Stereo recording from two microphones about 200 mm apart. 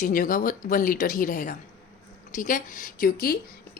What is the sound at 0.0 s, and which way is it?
A woman's voice, 40° left (ahead or behind).